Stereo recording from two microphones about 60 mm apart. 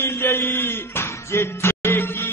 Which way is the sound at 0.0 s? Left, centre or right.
Left.